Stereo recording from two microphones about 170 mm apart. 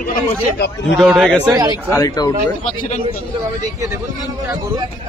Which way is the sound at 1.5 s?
20° right (ahead or behind).